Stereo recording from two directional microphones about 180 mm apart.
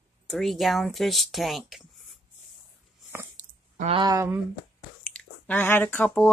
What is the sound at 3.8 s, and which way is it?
Speech, 30° right (ahead or behind).